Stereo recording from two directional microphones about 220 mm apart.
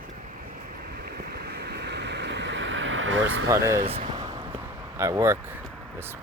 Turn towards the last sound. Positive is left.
turn(degrees=-10)  # may be behind; listen again after turning